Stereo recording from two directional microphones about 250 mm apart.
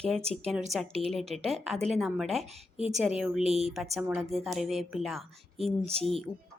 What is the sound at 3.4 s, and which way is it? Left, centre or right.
Speech, right.